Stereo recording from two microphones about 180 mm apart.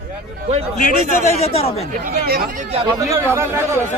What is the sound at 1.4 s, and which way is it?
Speech, 35° left (ahead or behind).